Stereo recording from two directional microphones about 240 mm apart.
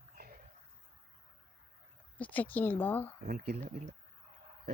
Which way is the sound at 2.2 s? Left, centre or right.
Centre.